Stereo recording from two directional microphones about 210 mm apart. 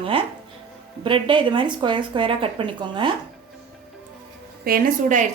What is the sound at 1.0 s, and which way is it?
Speech, 25° right (ahead or behind).